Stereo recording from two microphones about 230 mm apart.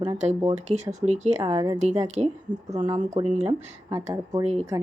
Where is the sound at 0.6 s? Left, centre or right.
Right.